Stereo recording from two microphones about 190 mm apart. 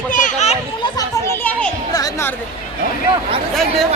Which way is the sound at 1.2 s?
10° left (ahead or behind).